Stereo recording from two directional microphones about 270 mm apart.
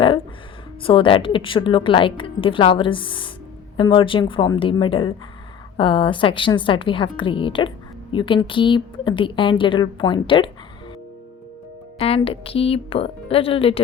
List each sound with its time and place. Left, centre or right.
0.8 s a woman's voice: centre
11.9 s a woman's voice: left